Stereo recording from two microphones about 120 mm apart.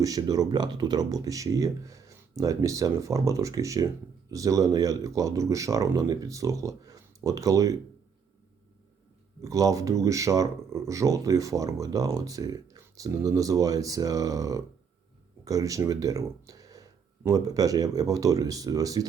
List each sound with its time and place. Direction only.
0.0 s speech: 30° right (ahead or behind)
9.4 s speech: 30° right (ahead or behind)